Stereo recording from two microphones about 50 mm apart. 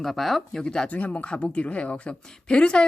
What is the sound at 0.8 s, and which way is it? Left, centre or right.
A woman's voice, left.